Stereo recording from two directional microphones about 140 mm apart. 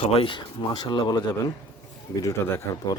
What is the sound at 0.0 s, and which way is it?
Speech, 45° left (ahead or behind).